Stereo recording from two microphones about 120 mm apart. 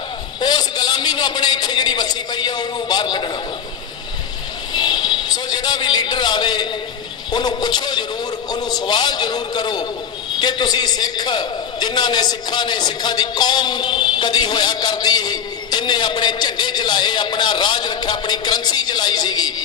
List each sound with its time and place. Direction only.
0.3 s a man's voice: 35° left (ahead or behind)
4.7 s a man's voice: 40° left (ahead or behind)